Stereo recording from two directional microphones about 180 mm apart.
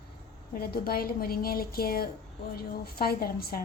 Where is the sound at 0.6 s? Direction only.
55° left (ahead or behind).